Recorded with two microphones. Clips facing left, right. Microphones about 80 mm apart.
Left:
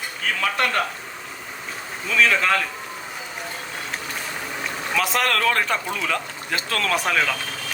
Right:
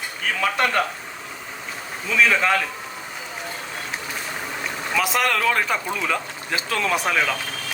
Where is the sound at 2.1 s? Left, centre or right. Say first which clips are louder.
Even; centre.